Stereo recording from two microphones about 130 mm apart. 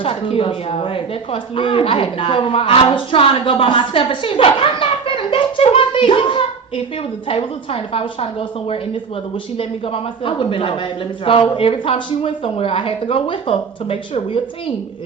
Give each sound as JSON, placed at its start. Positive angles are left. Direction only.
{"t": 0.0, "sound": "a woman's voice", "side_deg": 45}
{"t": 9.6, "sound": "a woman's voice", "side_deg": 45}